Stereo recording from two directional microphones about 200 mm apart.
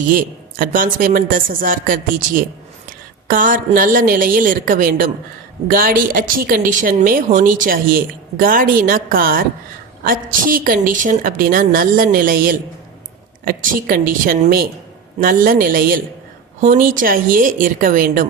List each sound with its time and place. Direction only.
0.1 s a woman's voice: 45° right (ahead or behind)